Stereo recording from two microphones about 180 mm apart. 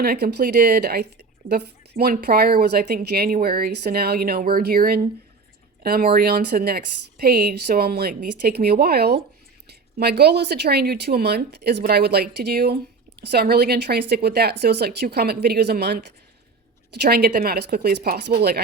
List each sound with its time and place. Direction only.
0.0 s a woman's voice: 60° right (ahead or behind)